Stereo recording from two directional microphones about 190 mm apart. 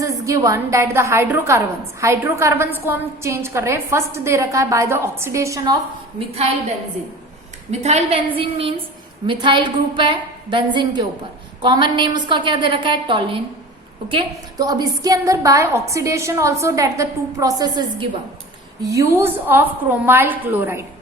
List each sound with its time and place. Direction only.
0.0 s a woman's voice: 15° right (ahead or behind)
7.7 s a woman's voice: 35° right (ahead or behind); by 20.8 s 10° right (ahead or behind)